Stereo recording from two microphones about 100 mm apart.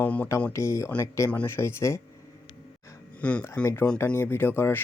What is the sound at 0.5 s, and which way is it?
Speech, 30° left (ahead or behind).